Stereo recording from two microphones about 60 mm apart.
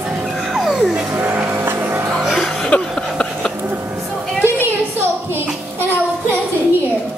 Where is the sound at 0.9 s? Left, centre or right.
Right.